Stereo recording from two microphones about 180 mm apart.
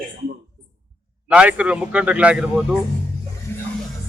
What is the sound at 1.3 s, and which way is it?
A man's voice, 5° right (ahead or behind).